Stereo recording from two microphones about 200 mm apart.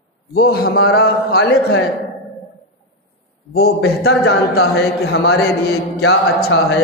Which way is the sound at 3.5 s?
50° left (ahead or behind).